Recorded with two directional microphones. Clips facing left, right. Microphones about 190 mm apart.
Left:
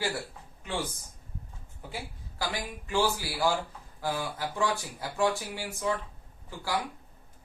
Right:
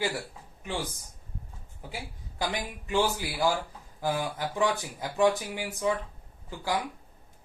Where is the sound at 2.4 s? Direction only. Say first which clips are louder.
Right 2 dB; 20° right (ahead or behind).